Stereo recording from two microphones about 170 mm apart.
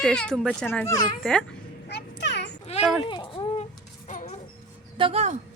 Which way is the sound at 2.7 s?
40° left (ahead or behind).